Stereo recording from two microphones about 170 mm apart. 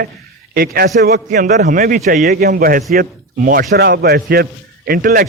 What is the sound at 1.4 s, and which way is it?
A man's voice, 45° right (ahead or behind).